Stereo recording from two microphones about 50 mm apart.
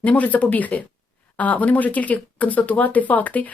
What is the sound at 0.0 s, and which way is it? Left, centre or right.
Speech, left.